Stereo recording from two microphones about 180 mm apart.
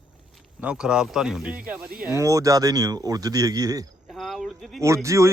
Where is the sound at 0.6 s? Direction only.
5° right (ahead or behind).